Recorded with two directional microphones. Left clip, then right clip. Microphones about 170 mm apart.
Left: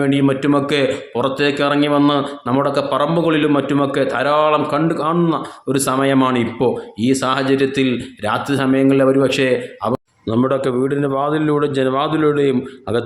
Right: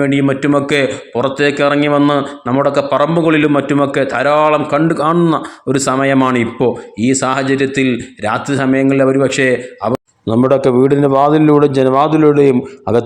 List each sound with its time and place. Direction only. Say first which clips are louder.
0.0 s a man's voice: right 3 dB; 30° right (ahead or behind)